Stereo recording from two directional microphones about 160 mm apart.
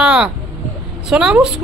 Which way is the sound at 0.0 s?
5° right (ahead or behind).